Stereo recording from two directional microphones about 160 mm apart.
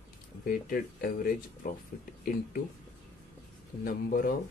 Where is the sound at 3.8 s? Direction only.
60° left (ahead or behind).